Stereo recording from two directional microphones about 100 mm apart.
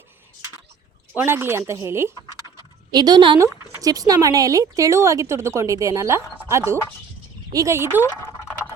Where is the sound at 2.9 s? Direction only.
45° right (ahead or behind).